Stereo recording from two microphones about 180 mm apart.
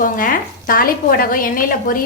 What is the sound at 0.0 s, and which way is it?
Speech, 50° left (ahead or behind).